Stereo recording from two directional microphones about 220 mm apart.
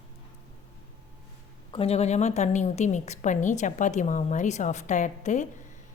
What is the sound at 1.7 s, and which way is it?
A woman's voice, 30° left (ahead or behind).